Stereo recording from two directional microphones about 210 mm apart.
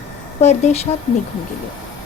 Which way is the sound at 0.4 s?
30° left (ahead or behind).